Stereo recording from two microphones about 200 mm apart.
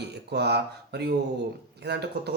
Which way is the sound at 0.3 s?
55° right (ahead or behind).